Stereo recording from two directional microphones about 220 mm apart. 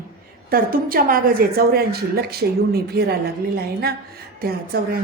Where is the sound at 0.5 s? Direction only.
40° right (ahead or behind).